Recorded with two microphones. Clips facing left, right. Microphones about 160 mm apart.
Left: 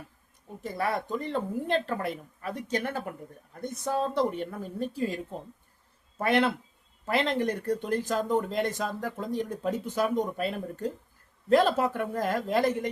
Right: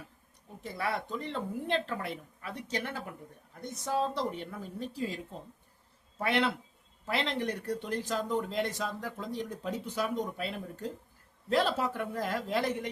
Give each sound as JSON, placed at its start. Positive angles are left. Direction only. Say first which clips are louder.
{"t": 0.6, "sound": "speech", "louder": "left 4 dB", "side_deg": 45}